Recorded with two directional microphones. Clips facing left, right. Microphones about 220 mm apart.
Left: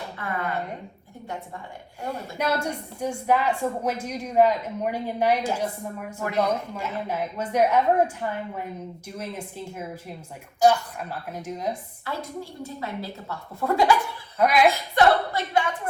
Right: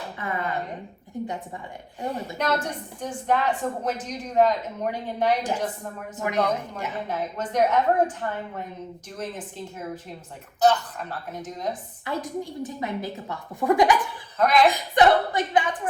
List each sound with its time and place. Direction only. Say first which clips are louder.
2.0 s a woman's voice: right 1 dB; 10° left (ahead or behind)
12.0 s a woman's voice: right 3 dB; 15° right (ahead or behind)
14.3 s a woman's voice: even; 10° left (ahead or behind)
14.7 s a woman's voice: right 1 dB; 20° right (ahead or behind)